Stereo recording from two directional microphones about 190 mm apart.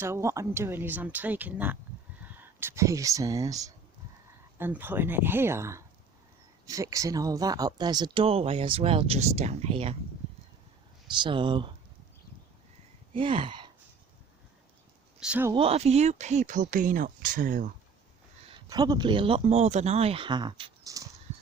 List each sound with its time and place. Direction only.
0.0 s speech: 15° right (ahead or behind); by 9.9 s 30° right (ahead or behind)
11.1 s speech: 25° right (ahead or behind)
13.1 s speech: 25° right (ahead or behind)
15.2 s speech: 10° right (ahead or behind)
15.5 s speech: 30° right (ahead or behind)
18.5 s speech: 20° right (ahead or behind)